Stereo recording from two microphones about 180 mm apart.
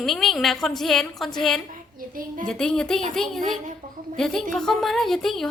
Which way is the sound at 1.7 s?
50° right (ahead or behind).